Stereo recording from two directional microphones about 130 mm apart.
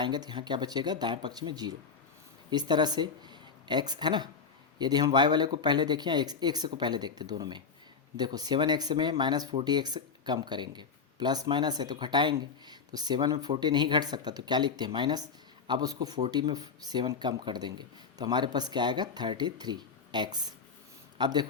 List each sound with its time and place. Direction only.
0.0 s speech: 35° right (ahead or behind)